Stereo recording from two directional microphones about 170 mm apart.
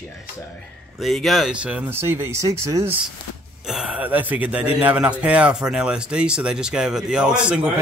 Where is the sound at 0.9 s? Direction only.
Centre (ahead or behind); by 3.0 s 15° right (ahead or behind).